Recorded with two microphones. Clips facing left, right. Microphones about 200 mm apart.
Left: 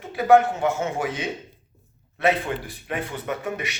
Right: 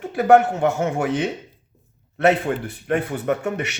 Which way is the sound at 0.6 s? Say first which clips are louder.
Right 4 dB; 55° right (ahead or behind).